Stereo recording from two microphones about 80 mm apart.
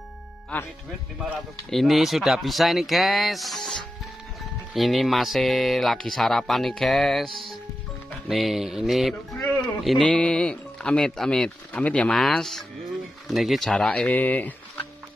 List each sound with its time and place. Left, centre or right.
0.5 s speech: centre
1.7 s speech: centre
8.3 s speech: centre
9.4 s a sound: centre
10.0 s speech: centre
12.1 s speech: centre
14.1 s speech: left